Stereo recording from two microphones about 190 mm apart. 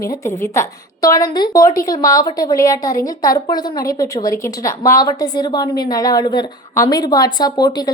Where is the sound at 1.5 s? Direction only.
45° left (ahead or behind).